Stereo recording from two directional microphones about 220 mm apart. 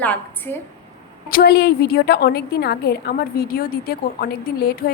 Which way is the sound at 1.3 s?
45° left (ahead or behind).